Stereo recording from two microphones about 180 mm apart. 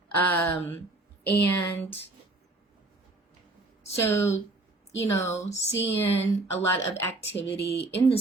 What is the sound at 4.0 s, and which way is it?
Speech, 15° left (ahead or behind).